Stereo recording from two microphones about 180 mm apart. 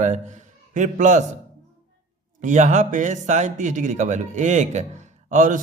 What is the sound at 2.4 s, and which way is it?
A man's voice, 40° right (ahead or behind).